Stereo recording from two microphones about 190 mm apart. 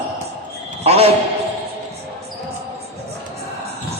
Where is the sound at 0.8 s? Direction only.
30° right (ahead or behind).